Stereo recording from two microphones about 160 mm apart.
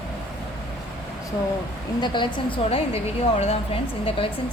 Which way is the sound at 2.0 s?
30° left (ahead or behind).